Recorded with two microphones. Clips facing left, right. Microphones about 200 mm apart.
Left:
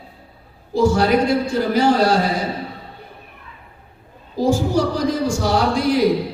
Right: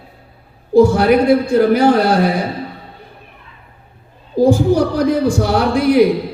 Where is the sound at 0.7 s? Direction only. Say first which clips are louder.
Right 6 dB; 60° right (ahead or behind).